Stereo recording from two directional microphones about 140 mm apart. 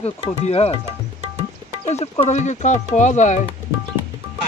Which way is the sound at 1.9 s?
50° left (ahead or behind).